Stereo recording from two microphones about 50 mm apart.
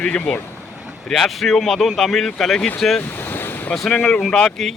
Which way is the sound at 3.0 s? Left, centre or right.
Left.